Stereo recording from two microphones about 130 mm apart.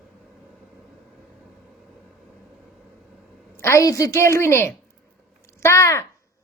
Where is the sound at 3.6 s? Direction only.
25° left (ahead or behind).